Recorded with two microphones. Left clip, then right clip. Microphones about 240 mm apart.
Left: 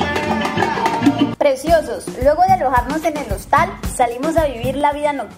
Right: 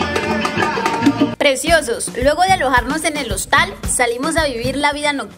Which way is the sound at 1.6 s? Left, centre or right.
Right.